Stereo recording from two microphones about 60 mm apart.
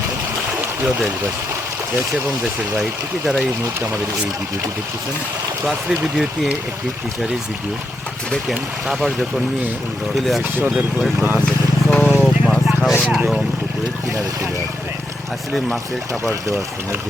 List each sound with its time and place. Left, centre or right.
5.6 s speech: centre
8.4 s speech: centre
10.2 s speech: centre
11.3 s vehicle: centre
12.2 s vehicle: centre